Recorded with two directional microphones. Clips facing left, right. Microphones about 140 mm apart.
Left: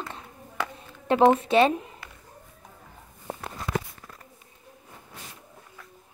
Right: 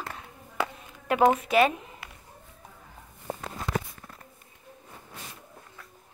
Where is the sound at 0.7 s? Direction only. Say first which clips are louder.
Left 5 dB; 30° left (ahead or behind).